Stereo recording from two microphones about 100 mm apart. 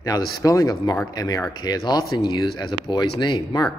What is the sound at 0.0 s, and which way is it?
Speech, 35° left (ahead or behind).